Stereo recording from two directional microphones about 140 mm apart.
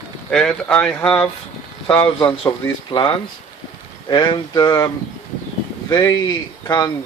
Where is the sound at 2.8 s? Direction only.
35° left (ahead or behind).